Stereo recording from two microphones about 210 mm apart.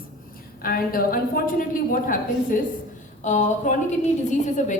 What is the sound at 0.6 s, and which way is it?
A woman's voice, 45° left (ahead or behind).